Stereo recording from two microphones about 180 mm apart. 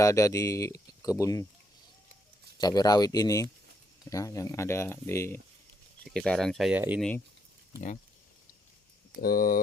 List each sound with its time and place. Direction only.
0.0 s speech: 15° left (ahead or behind)
2.6 s speech: 20° left (ahead or behind)
6.1 s speech: 5° left (ahead or behind)
9.2 s speech: 50° left (ahead or behind)